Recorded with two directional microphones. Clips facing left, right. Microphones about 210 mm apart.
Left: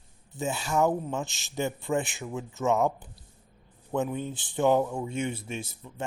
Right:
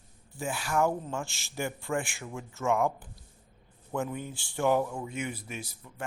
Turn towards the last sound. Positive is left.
turn(degrees=25)  # may be behind; listen again after turning